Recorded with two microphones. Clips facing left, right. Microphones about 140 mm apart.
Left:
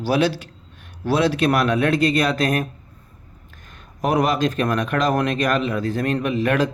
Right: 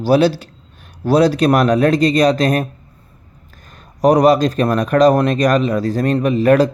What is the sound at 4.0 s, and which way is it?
Speech, 40° right (ahead or behind).